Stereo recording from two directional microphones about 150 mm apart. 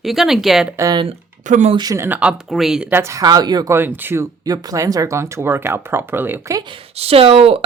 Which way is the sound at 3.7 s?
15° right (ahead or behind).